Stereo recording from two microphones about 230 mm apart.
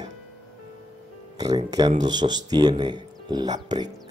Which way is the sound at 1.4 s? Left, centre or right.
Centre.